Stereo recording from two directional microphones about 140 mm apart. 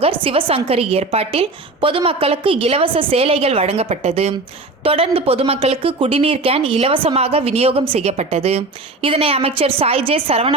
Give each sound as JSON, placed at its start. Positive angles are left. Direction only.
{"t": 0.0, "sound": "speech", "side_deg": -40}